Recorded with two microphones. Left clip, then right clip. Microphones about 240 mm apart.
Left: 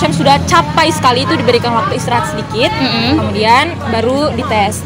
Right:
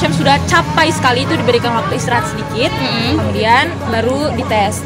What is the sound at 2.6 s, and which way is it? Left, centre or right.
Speech, centre.